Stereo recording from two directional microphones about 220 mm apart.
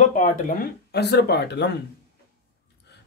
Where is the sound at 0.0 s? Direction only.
35° left (ahead or behind).